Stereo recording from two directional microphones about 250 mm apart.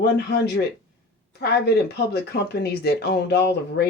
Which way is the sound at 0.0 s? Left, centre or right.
Left.